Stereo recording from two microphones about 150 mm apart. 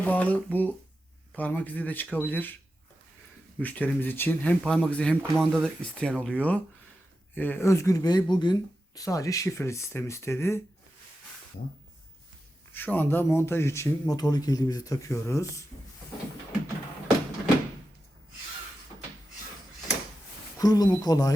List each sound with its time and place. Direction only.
0.0 s speech: 10° left (ahead or behind)
3.6 s a man's voice: 10° left (ahead or behind)
12.7 s a man's voice: 10° left (ahead or behind)
20.6 s a man's voice: 25° left (ahead or behind)